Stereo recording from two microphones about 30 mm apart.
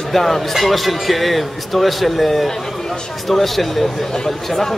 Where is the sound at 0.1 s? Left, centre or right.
Centre.